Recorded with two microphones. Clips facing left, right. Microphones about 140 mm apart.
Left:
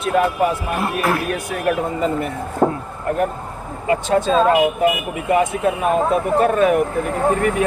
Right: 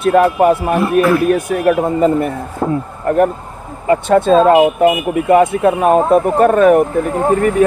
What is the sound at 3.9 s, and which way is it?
Speech, 60° right (ahead or behind).